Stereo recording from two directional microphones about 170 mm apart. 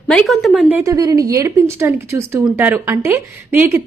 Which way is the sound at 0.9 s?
20° right (ahead or behind).